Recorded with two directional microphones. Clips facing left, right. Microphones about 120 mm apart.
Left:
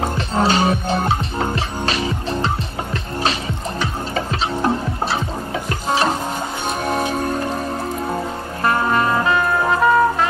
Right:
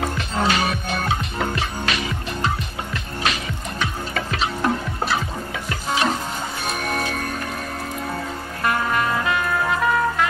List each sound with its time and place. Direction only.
0.0 s music: 30° left (ahead or behind)